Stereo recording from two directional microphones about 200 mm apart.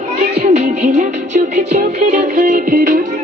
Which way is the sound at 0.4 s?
35° right (ahead or behind).